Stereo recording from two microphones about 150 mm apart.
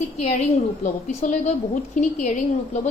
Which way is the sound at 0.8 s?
55° left (ahead or behind).